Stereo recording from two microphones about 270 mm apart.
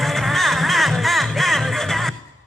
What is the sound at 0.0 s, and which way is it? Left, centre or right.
Music, centre.